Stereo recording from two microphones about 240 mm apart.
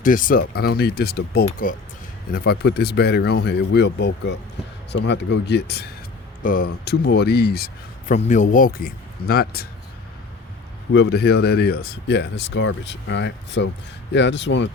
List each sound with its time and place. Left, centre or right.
0.0 s a man's voice: left
10.9 s speech: left